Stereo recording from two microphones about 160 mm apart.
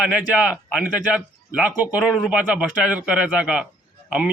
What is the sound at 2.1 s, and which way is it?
A man's voice, 5° right (ahead or behind).